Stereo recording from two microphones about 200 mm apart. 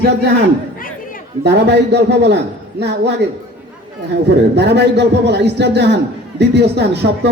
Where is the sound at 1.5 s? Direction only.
55° right (ahead or behind).